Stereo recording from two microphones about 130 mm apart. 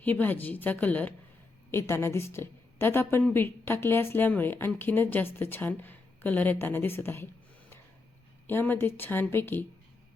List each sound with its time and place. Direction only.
0.0 s a woman's voice: 15° left (ahead or behind)
8.4 s a woman's voice: 15° left (ahead or behind)